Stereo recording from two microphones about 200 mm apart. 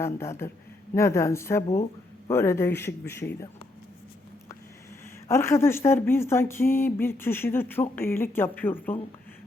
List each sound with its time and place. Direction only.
0.0 s speech: 15° left (ahead or behind)
5.3 s speech: 15° left (ahead or behind)